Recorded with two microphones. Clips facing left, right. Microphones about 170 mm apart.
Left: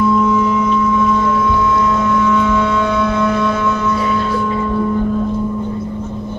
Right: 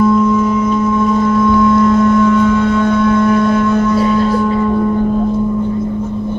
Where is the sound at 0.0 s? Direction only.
45° right (ahead or behind).